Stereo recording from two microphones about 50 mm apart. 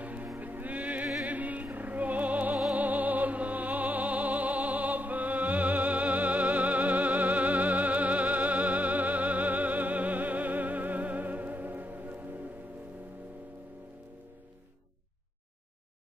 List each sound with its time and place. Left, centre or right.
0.0 s music: right